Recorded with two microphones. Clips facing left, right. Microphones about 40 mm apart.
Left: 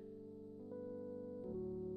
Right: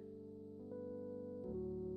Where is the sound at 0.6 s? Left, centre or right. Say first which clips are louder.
Even; centre.